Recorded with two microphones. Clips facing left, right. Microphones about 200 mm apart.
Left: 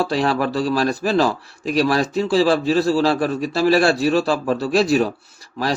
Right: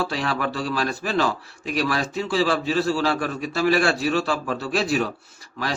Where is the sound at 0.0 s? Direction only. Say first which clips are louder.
Left 6 dB; 40° left (ahead or behind).